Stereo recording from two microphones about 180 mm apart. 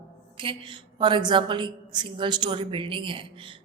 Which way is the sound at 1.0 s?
25° right (ahead or behind).